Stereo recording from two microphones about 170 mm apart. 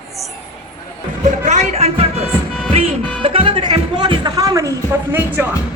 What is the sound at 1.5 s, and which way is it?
Music, 40° right (ahead or behind).